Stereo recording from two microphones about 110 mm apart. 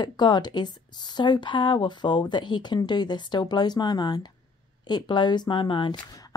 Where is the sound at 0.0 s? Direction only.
40° left (ahead or behind).